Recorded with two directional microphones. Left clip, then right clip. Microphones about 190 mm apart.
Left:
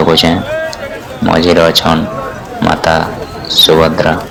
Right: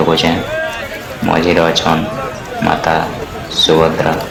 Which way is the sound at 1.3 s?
30° left (ahead or behind).